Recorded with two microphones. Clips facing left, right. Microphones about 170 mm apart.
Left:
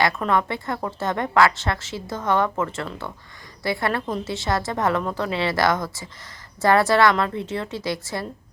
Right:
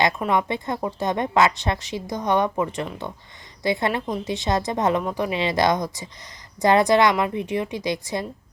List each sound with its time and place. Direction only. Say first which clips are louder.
0.0 s a woman's voice: even; 20° right (ahead or behind)